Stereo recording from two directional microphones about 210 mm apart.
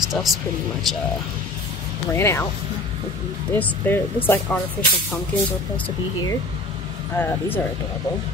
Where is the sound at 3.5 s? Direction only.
10° left (ahead or behind).